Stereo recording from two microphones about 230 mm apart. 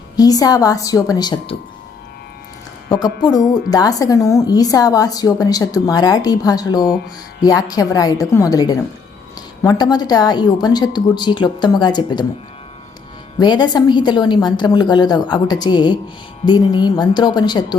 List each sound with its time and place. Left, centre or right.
0.2 s a woman's voice: centre
2.9 s a woman's voice: centre
13.4 s a woman's voice: centre